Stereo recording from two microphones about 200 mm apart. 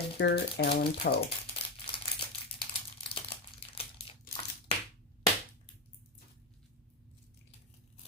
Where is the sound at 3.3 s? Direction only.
30° left (ahead or behind).